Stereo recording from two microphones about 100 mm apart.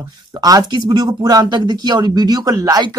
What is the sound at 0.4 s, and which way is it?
Speech, 40° right (ahead or behind).